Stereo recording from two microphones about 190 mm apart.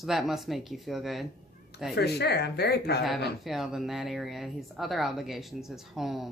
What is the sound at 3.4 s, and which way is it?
A woman's voice, centre (ahead or behind).